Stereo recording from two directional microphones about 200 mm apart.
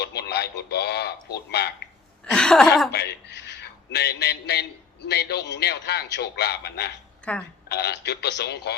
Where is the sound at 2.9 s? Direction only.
55° left (ahead or behind).